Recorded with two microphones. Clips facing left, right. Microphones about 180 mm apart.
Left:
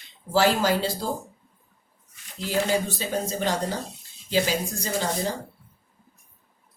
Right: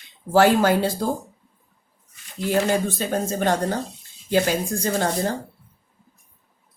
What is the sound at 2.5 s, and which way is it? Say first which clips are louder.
Speech: right 4 dB; 55° right (ahead or behind).